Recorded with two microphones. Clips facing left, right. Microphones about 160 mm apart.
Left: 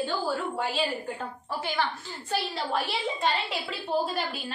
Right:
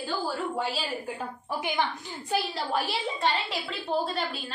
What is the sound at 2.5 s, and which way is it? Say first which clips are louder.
A woman's voice: even; centre (ahead or behind).